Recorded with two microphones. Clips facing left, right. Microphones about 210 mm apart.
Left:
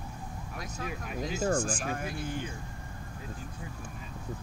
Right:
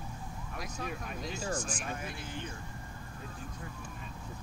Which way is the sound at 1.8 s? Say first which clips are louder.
Left 5 dB; 55° left (ahead or behind).